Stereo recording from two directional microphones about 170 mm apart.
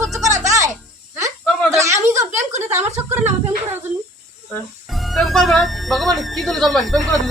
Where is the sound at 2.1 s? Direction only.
15° right (ahead or behind).